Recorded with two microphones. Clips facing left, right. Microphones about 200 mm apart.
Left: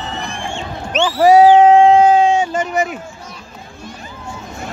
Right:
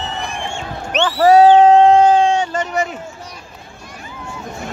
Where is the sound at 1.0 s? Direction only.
10° left (ahead or behind).